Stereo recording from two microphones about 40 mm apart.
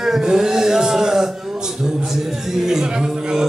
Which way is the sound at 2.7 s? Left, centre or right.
Centre.